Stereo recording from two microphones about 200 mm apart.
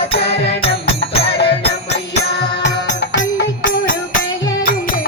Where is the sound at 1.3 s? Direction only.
55° left (ahead or behind).